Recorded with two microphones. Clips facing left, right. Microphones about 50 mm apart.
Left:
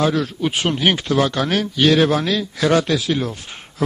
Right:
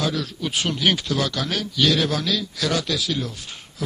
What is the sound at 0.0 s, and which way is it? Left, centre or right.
Speech, left.